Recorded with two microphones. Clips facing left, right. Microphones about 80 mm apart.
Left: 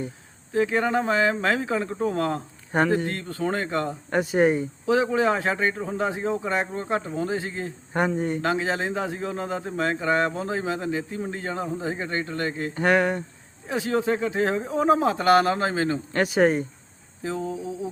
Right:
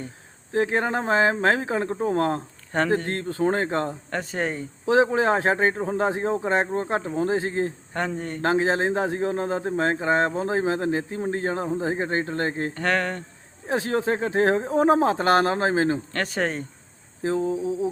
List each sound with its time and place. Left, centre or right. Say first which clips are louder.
0.5 s speech: left 1 dB; right
2.7 s speech: left 2 dB; centre
3.1 s speech: right 4 dB; right
4.1 s speech: left 10 dB; centre
4.9 s speech: right 2 dB; right
7.9 s speech: left 6 dB; centre
8.4 s speech: right 3 dB; right
12.7 s speech: left 3 dB; centre
13.7 s speech: even; right
16.1 s speech: left 6 dB; centre
17.2 s speech: right 5 dB; right